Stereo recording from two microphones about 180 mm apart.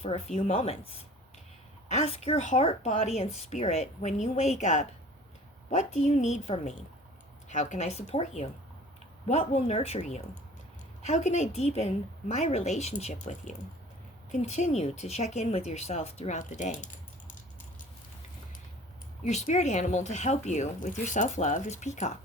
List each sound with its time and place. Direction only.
0.0 s speech: 35° left (ahead or behind)
1.9 s speech: 35° left (ahead or behind)
19.2 s speech: 40° left (ahead or behind)